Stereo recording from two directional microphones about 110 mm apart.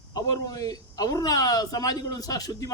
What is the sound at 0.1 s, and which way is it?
A man's voice, 35° left (ahead or behind).